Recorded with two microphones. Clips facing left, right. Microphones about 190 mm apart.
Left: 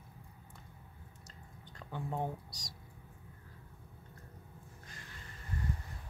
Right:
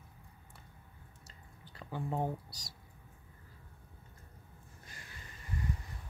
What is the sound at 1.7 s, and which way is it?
Drip, 5° right (ahead or behind).